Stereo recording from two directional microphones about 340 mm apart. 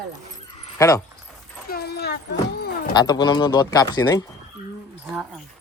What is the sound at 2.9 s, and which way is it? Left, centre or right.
Speech, centre.